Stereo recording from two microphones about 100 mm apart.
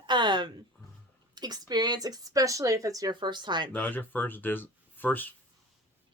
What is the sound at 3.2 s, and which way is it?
Speech, 50° right (ahead or behind).